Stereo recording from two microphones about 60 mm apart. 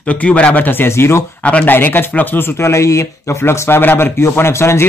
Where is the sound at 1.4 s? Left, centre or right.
Left.